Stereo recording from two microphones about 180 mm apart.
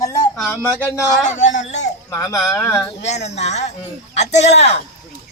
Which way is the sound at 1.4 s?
90° left.